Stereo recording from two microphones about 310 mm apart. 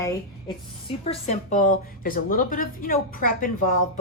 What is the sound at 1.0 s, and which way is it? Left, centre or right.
A woman's voice, left.